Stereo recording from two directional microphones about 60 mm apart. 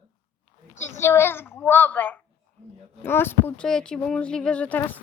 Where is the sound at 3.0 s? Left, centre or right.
Left.